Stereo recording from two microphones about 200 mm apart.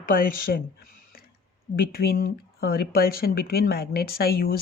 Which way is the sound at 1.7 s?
50° left (ahead or behind).